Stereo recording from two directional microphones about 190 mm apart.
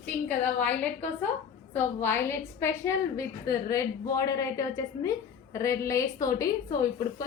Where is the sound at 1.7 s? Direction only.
10° left (ahead or behind).